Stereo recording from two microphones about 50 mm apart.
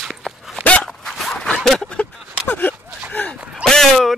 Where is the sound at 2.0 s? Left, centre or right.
Left.